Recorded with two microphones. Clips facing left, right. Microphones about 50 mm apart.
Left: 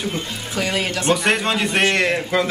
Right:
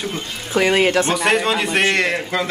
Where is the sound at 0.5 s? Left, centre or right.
Right.